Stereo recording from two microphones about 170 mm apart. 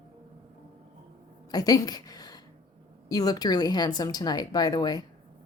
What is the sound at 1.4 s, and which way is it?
A woman's voice, 20° left (ahead or behind).